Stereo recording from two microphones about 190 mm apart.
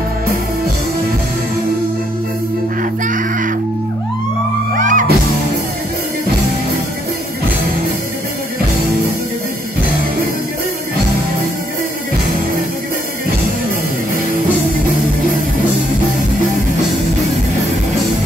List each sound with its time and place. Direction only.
2.8 s music: 45° right (ahead or behind)
4.7 s music: 45° right (ahead or behind)